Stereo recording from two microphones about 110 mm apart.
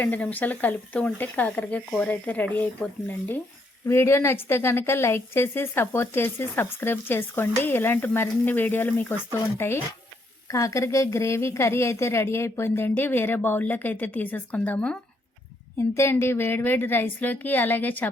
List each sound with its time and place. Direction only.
0.0 s a woman's voice: 15° left (ahead or behind)
16.0 s a woman's voice: 25° left (ahead or behind)